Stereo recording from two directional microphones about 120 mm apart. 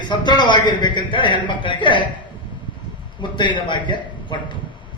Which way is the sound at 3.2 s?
40° left (ahead or behind).